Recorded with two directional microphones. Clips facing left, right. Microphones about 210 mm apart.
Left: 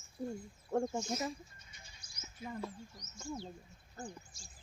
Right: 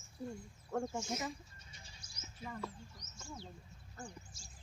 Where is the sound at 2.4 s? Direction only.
35° right (ahead or behind).